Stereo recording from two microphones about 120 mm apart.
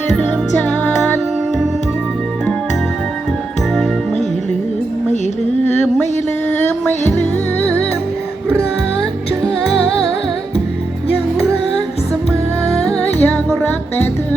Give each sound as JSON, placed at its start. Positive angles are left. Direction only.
{"t": 0.1, "sound": "music", "side_deg": 10}
{"t": 12.6, "sound": "music", "side_deg": 5}